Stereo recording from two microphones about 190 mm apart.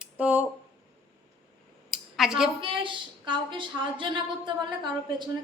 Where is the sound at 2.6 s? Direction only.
25° right (ahead or behind).